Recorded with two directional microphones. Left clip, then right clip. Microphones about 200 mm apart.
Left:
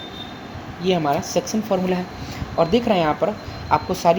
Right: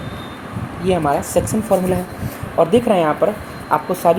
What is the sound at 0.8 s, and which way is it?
Speech, 25° left (ahead or behind).